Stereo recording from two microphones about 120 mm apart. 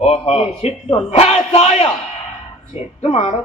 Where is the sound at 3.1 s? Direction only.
55° left (ahead or behind).